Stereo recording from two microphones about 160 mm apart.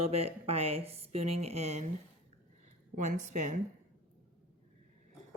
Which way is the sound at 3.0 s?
50° right (ahead or behind).